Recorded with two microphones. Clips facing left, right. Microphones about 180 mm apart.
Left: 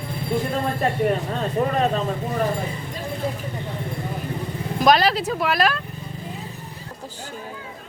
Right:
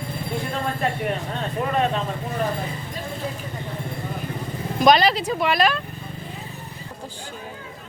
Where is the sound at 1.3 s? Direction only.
40° left (ahead or behind).